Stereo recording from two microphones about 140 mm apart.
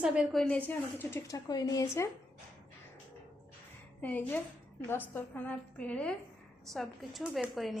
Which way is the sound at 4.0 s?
10° left (ahead or behind).